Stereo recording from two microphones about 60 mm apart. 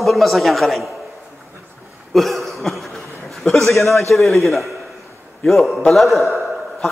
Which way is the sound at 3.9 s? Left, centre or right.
Left.